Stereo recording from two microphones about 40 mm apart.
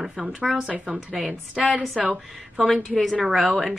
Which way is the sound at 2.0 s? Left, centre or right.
Centre.